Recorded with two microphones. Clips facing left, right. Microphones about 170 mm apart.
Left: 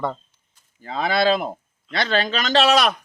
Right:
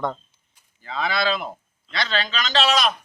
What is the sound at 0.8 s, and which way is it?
Speech, 45° left (ahead or behind).